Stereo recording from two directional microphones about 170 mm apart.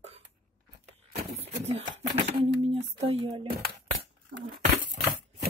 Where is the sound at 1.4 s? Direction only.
40° right (ahead or behind).